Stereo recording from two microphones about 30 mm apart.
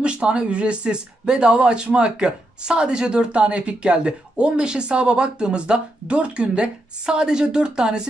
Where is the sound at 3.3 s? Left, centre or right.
Right.